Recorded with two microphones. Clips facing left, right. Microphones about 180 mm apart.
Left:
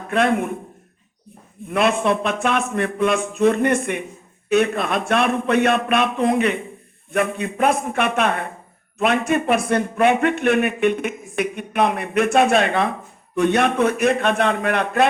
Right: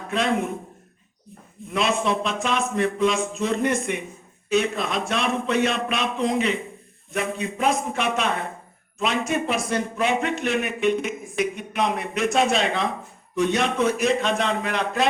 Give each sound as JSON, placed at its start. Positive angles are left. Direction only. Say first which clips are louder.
{"t": 0.1, "sound": "a man's voice", "louder": "left 4 dB", "side_deg": 60}
{"t": 1.6, "sound": "a man's voice", "louder": "left 5 dB", "side_deg": 60}